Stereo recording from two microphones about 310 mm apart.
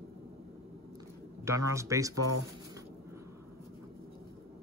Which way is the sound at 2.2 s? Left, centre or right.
Right.